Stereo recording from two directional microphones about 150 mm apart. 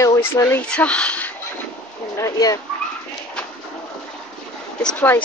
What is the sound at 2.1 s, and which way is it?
Speech, 20° left (ahead or behind).